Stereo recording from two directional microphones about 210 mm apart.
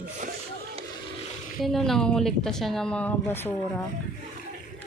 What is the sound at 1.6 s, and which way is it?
Speech, centre (ahead or behind).